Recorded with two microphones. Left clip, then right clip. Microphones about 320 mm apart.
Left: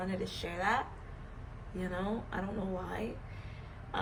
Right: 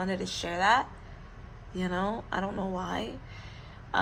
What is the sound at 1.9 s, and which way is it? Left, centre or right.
Speech, right.